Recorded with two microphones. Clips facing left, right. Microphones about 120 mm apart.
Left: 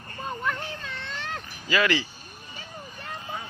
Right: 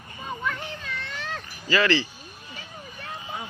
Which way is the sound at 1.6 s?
10° left (ahead or behind).